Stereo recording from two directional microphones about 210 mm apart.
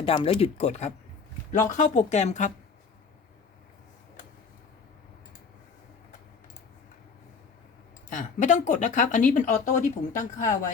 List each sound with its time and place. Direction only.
0.0 s speech: 25° left (ahead or behind)
8.1 s speech: 35° left (ahead or behind)